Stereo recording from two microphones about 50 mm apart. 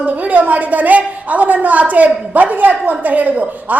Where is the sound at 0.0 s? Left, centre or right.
Right.